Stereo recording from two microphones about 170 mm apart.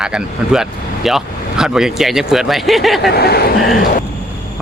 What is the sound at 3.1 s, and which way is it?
Speech, 70° left (ahead or behind).